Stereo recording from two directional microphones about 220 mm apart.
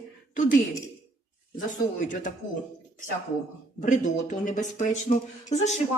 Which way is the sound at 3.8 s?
35° left (ahead or behind).